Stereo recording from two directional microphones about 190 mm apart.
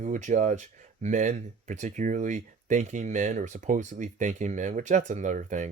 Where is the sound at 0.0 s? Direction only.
40° right (ahead or behind).